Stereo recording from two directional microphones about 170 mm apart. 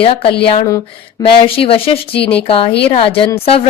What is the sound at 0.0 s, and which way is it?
A woman's voice, 35° left (ahead or behind).